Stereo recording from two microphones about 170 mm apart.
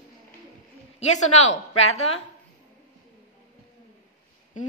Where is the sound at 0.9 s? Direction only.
40° left (ahead or behind).